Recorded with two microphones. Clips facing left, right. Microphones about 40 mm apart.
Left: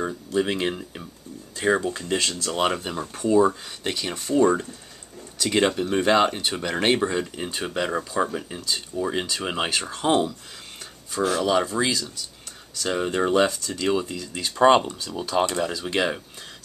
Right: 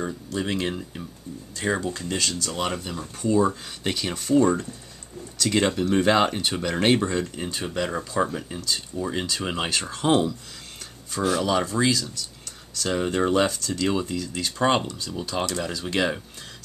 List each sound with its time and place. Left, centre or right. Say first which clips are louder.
0.0 s speech: left 4 dB; centre
3.3 s speech: left 4 dB; centre